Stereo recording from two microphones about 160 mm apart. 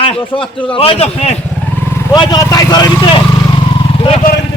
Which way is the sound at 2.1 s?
25° left (ahead or behind).